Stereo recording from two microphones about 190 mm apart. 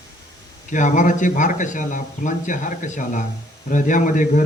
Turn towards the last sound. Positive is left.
turn(degrees=40)  # may be behind; listen again after turning